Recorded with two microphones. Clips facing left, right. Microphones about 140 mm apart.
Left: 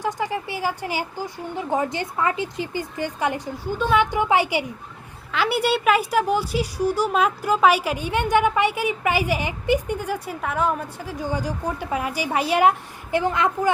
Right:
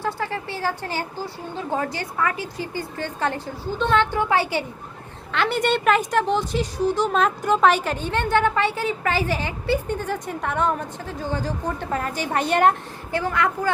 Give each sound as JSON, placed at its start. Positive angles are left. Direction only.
{"t": 0.0, "sound": "a woman's voice", "side_deg": 15}
{"t": 13.1, "sound": "a woman's voice", "side_deg": 20}